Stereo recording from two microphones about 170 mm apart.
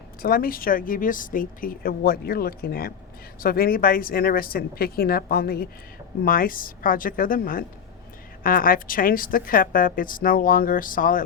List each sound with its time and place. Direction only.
0.2 s speech: 60° left (ahead or behind)